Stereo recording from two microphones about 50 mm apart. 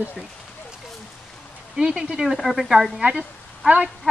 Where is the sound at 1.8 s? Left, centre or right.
Centre.